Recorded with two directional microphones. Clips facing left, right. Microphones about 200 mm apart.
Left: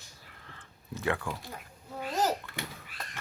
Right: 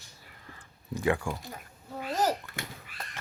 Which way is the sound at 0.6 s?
15° right (ahead or behind).